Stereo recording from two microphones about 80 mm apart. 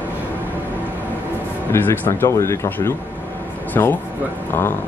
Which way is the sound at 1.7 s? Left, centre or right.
Left.